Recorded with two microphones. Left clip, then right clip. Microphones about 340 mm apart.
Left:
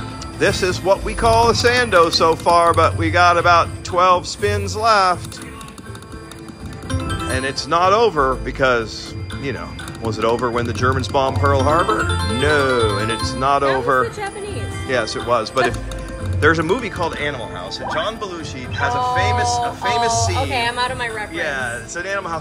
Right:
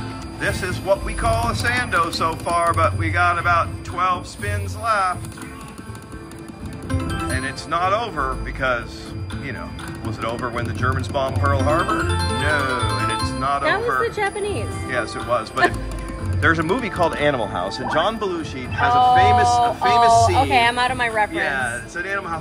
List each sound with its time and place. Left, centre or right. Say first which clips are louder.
0.4 s speech: left 7 dB; centre
6.9 s speech: left 2 dB; centre
10.1 s speech: left 7 dB; centre
14.0 s a woman's voice: right 3 dB; centre
14.9 s speech: left 4 dB; centre
20.5 s a woman's voice: right 3 dB; centre
21.3 s speech: even; centre